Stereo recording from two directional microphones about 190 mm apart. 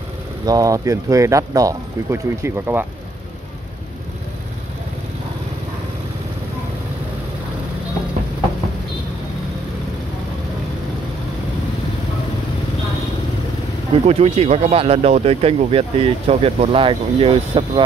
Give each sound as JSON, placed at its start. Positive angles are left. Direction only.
{"t": 0.5, "sound": "speech", "side_deg": -15}
{"t": 14.0, "sound": "speech", "side_deg": -30}